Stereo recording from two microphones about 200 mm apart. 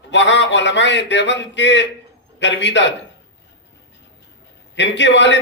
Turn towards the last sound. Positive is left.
turn(degrees=65)  # may be behind; listen again after turning